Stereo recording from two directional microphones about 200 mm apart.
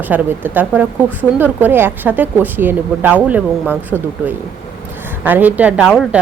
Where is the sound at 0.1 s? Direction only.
10° right (ahead or behind).